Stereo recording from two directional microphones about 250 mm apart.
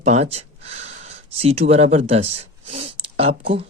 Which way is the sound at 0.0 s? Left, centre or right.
Right.